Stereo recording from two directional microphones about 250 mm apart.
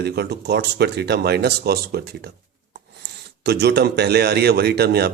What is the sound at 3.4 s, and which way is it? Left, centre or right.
A man's voice, right.